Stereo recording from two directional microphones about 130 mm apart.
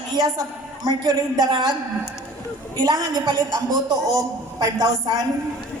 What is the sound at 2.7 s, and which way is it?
A woman's voice, 35° right (ahead or behind).